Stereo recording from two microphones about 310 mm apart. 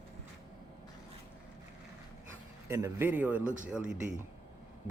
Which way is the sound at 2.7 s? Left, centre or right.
Centre.